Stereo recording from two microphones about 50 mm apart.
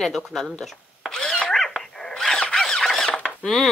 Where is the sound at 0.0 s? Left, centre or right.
Centre.